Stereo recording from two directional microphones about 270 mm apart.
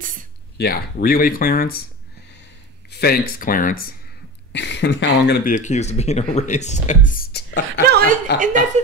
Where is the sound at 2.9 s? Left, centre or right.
Left.